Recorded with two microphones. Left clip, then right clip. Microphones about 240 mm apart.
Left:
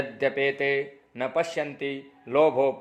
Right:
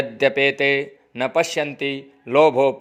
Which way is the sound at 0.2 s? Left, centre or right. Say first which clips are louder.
Right 8 dB; right.